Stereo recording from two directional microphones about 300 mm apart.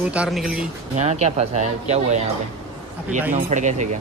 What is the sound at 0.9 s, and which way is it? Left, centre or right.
Speech, right.